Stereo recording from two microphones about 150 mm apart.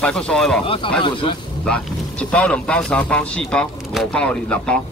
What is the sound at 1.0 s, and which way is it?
Speech, 35° left (ahead or behind).